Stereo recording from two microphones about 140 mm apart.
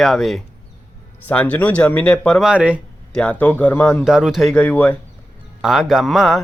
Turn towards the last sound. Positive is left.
turn(degrees=0)  # may be behind; listen again after turning